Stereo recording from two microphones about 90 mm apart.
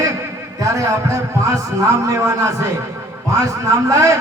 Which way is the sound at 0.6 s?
35° right (ahead or behind).